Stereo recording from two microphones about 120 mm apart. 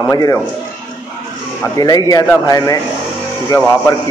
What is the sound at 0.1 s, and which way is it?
Speech, 30° left (ahead or behind).